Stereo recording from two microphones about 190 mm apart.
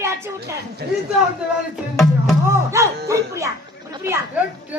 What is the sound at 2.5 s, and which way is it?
A woman's voice, 15° right (ahead or behind).